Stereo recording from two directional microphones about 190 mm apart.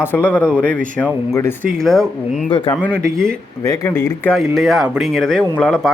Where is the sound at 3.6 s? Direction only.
15° left (ahead or behind).